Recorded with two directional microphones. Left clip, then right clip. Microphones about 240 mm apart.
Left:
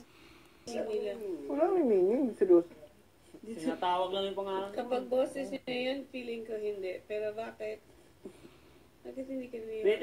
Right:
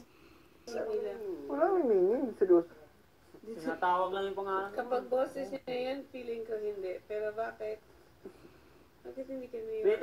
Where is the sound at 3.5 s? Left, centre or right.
Left.